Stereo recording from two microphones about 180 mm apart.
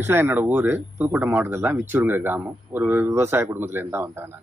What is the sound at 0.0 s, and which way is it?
Speech, 15° right (ahead or behind).